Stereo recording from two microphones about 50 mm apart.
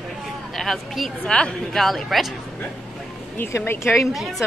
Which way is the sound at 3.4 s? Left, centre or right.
Left.